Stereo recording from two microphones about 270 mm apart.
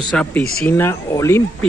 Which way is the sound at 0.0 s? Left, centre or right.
Centre.